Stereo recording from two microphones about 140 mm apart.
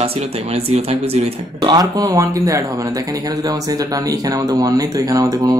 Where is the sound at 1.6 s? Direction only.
30° right (ahead or behind).